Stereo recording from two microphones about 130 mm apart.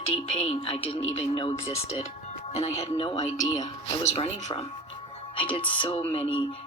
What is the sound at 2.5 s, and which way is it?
Speech, 55° left (ahead or behind).